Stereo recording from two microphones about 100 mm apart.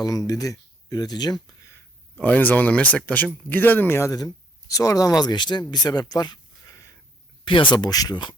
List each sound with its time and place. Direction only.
0.0 s speech: 35° left (ahead or behind)
2.1 s speech: 15° left (ahead or behind)
4.7 s speech: 35° left (ahead or behind)
7.4 s speech: 55° left (ahead or behind)